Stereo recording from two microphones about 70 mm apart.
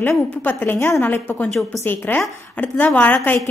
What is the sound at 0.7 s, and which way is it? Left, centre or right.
A woman's voice, left.